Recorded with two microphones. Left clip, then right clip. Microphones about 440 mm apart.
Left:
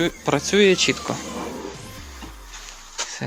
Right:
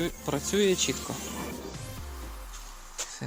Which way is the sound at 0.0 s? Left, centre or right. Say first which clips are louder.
Left 10 dB; left.